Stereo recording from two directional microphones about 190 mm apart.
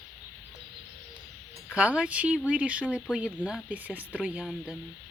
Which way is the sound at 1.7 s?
5° right (ahead or behind).